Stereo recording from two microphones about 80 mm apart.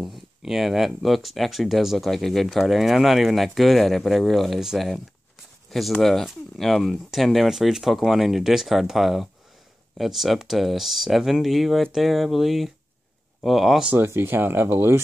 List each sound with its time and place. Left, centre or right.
0.0 s speech: centre
13.9 s speech: right